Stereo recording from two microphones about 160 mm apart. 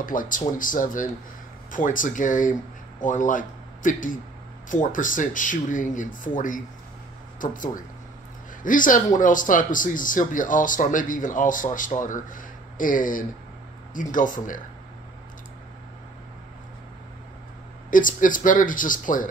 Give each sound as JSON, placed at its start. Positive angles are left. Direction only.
{"t": 0.0, "sound": "speech", "side_deg": 55}
{"t": 17.9, "sound": "speech", "side_deg": 55}